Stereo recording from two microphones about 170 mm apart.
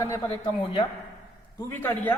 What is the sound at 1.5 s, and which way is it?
Speech, 15° left (ahead or behind).